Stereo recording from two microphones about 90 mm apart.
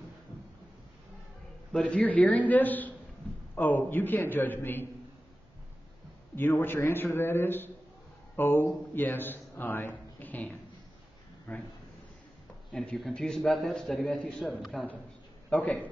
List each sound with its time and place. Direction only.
1.7 s a man's voice: 10° left (ahead or behind)
6.3 s a man's voice: 25° left (ahead or behind)
12.9 s a man's voice: 5° left (ahead or behind)
15.5 s a man's voice: 15° left (ahead or behind)